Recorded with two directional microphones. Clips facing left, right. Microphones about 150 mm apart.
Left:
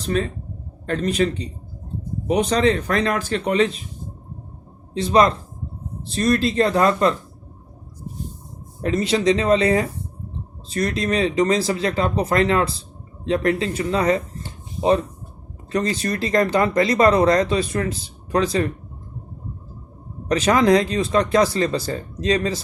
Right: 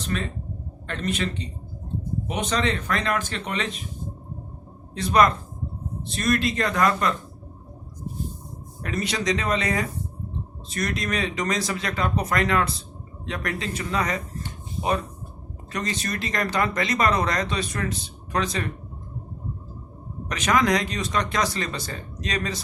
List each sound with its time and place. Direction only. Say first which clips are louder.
0.0 s speech: left 6 dB; 35° left (ahead or behind)
4.9 s speech: left 3 dB; 25° left (ahead or behind)
8.8 s speech: left 8 dB; 25° left (ahead or behind)
20.2 s speech: left 6 dB; 30° left (ahead or behind)